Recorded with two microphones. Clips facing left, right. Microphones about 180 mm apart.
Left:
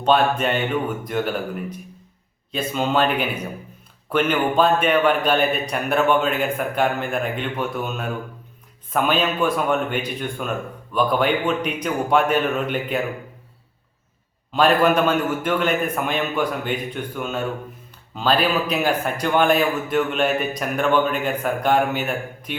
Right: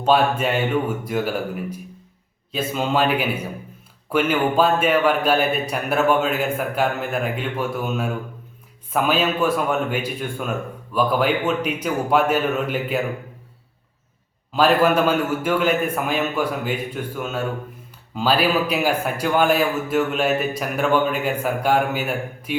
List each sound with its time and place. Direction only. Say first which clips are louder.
0.0 s a man's voice: even; 5° right (ahead or behind)
14.5 s a man's voice: even; 5° right (ahead or behind)